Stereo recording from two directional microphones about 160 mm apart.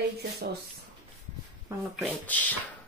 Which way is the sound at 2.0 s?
10° left (ahead or behind).